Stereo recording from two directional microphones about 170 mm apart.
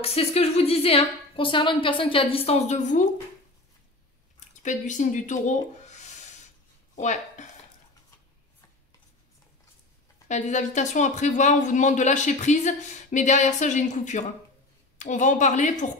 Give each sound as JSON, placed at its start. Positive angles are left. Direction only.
{"t": 0.0, "sound": "a woman's voice", "side_deg": 35}
{"t": 4.6, "sound": "speech", "side_deg": 45}
{"t": 7.0, "sound": "speech", "side_deg": 45}
{"t": 10.2, "sound": "speech", "side_deg": 45}